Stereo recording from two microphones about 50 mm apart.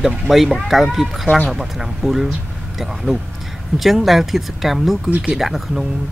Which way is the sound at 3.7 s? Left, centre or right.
Centre.